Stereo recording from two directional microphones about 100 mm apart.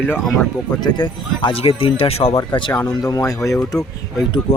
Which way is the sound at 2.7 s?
35° left (ahead or behind).